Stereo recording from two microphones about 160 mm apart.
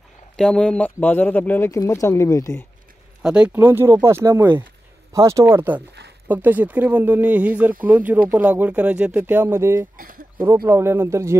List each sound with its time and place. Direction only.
0.4 s speech: 5° left (ahead or behind)
3.2 s speech: 5° right (ahead or behind)
9.9 s a sound: 60° right (ahead or behind)
10.4 s speech: 15° right (ahead or behind)